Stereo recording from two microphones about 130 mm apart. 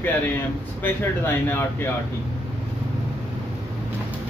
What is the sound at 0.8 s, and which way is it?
Speech, 15° left (ahead or behind).